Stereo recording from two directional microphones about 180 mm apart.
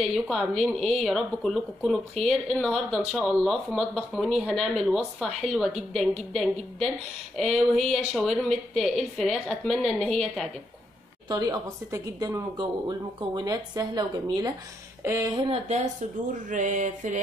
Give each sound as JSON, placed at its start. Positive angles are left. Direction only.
{"t": 0.0, "sound": "speech", "side_deg": 0}
{"t": 11.2, "sound": "speech", "side_deg": -20}
{"t": 15.5, "sound": "a woman's voice", "side_deg": -40}
{"t": 16.4, "sound": "a sound", "side_deg": -45}